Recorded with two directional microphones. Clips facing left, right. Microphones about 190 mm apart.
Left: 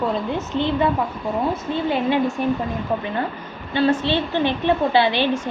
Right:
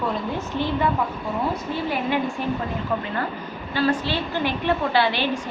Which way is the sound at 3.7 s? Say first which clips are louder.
Left 4 dB; 25° left (ahead or behind).